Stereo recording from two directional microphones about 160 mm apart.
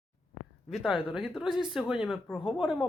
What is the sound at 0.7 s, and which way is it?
Speech, centre (ahead or behind).